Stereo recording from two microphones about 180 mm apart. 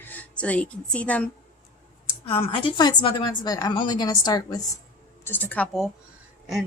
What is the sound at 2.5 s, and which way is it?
A woman's voice, 25° left (ahead or behind).